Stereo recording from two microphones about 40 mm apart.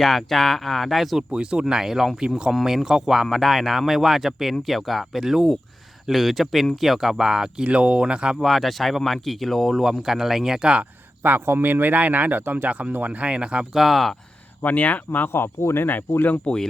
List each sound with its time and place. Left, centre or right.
0.0 s speech: centre
1.3 s speech: right
1.7 s speech: centre
7.6 s speech: right
8.4 s speech: centre
10.1 s speech: centre
11.2 s speech: right
12.9 s speech: right
13.7 s speech: centre
14.6 s speech: left
15.3 s speech: left